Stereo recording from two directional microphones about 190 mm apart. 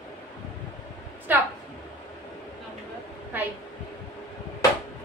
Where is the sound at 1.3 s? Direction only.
10° right (ahead or behind).